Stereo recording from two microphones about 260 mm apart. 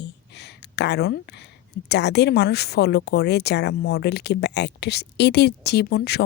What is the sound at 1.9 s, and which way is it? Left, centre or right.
Speech, left.